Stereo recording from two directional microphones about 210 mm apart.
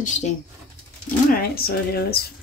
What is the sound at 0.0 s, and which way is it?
Speech, 35° left (ahead or behind).